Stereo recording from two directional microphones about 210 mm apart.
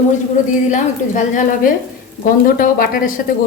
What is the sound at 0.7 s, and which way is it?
A woman's voice, 35° left (ahead or behind).